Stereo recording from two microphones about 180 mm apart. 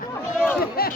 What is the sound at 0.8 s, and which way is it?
Speech, 60° left (ahead or behind).